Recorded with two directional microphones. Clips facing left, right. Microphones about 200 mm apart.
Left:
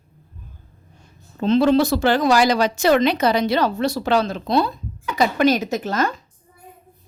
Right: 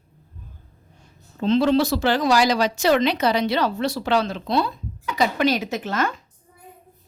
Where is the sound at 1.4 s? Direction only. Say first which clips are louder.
Left 2 dB; 50° left (ahead or behind).